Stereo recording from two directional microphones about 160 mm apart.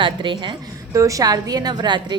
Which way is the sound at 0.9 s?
20° right (ahead or behind).